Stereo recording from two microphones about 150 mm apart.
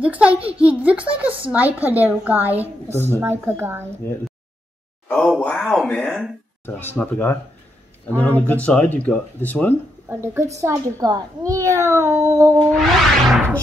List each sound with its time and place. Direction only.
0.0 s a woman's voice: 10° right (ahead or behind)
5.0 s a sound: 5° left (ahead or behind)
5.4 s speech: 10° left (ahead or behind)
6.6 s speech: 15° left (ahead or behind)
10.0 s a child's voice: 15° right (ahead or behind)
12.7 s music: centre (ahead or behind)